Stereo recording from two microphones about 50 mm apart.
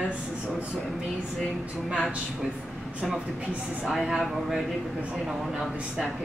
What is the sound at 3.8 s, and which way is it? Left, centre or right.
Speech, centre.